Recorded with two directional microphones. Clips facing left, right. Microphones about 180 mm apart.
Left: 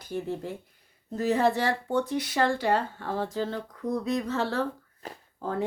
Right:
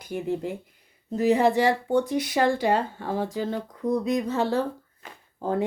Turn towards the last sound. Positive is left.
turn(degrees=-20)  # may be behind; listen again after turning